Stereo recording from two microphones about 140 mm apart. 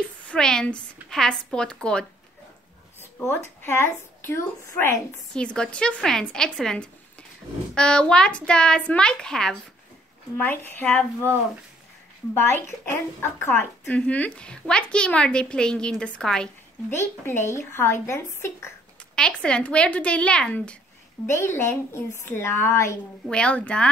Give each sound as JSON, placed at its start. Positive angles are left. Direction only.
{"t": 0.3, "sound": "a woman's voice", "side_deg": 5}
{"t": 3.0, "sound": "a woman's voice", "side_deg": 15}
{"t": 5.3, "sound": "a woman's voice", "side_deg": 5}
{"t": 12.4, "sound": "a woman's voice", "side_deg": 15}
{"t": 16.9, "sound": "a woman's voice", "side_deg": 15}
{"t": 19.1, "sound": "a woman's voice", "side_deg": 5}
{"t": 21.3, "sound": "a woman's voice", "side_deg": 20}
{"t": 23.3, "sound": "a woman's voice", "side_deg": 10}